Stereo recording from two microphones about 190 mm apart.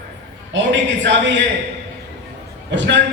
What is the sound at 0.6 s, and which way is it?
Speech, 70° right (ahead or behind).